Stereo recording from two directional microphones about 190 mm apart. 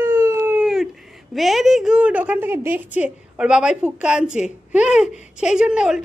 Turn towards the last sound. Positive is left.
turn(degrees=-5)  # may be behind; listen again after turning